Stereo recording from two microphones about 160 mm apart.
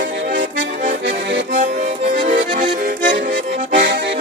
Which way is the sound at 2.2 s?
50° right (ahead or behind).